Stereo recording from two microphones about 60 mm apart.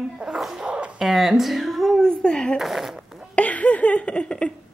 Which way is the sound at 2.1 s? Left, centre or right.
Centre.